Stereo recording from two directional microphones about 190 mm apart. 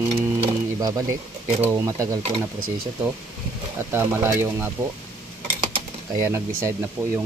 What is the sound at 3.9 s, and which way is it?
Speech, 10° right (ahead or behind).